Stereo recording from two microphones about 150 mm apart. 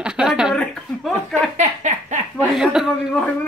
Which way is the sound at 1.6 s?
50° right (ahead or behind).